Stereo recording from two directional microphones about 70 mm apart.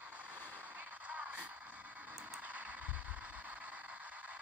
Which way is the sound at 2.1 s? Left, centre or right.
Right.